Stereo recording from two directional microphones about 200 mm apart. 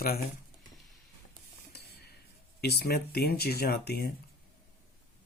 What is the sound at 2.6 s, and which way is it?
Speech, 55° left (ahead or behind).